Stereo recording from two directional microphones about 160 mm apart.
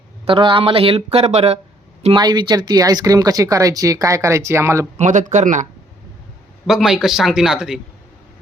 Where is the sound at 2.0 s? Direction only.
30° right (ahead or behind).